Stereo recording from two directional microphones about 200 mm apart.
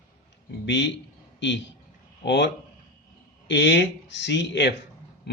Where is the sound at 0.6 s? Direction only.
60° left (ahead or behind).